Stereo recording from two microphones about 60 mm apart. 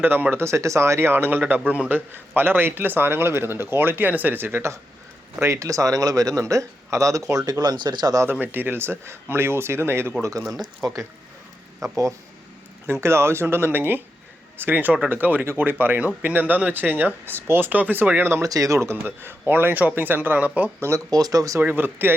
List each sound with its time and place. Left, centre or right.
0.0 s speech: right
5.5 s speech: right
6.4 s speech: right
8.3 s speech: right
10.8 s speech: right
11.8 s speech: right
12.9 s speech: right
18.4 s speech: right
18.8 s speech: right
20.7 s speech: right
21.1 s speech: right
21.6 s speech: right